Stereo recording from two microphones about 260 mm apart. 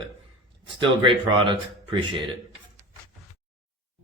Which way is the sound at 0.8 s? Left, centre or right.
Centre.